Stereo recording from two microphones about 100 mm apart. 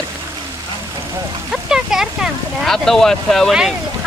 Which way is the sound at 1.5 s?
5° right (ahead or behind).